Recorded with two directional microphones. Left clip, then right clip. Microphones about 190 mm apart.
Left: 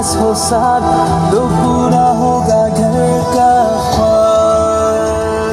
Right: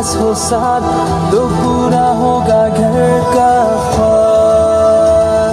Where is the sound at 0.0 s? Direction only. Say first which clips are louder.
Left 1 dB; 45° left (ahead or behind).